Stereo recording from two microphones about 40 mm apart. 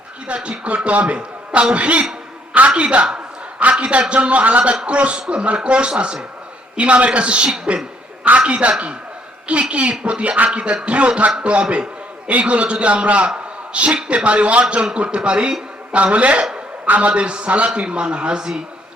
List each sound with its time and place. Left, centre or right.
0.3 s a man's voice: right
16.8 s a man's voice: right
17.1 s a man's voice: right